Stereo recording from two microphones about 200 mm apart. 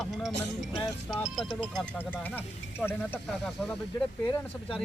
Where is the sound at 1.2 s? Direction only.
Centre (ahead or behind).